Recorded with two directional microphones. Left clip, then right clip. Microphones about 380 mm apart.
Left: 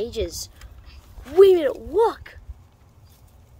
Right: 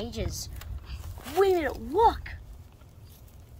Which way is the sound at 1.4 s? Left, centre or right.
Left.